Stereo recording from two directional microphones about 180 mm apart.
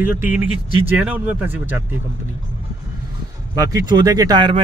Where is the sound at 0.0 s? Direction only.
10° right (ahead or behind).